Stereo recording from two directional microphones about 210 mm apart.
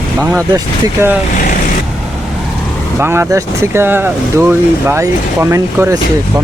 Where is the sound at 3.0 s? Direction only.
10° right (ahead or behind).